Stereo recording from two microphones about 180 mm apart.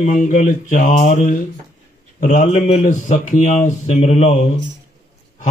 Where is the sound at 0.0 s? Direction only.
45° left (ahead or behind).